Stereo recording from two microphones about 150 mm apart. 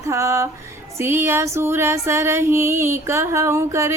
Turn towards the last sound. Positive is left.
turn(degrees=-20)  # may be behind; listen again after turning